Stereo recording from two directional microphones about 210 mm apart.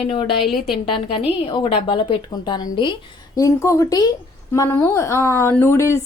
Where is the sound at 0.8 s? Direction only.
25° left (ahead or behind).